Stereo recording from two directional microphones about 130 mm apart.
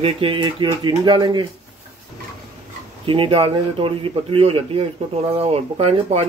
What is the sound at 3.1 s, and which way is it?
A man's voice, 45° right (ahead or behind).